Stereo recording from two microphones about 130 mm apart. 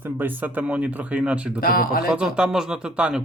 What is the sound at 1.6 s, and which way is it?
Speech, 90° left.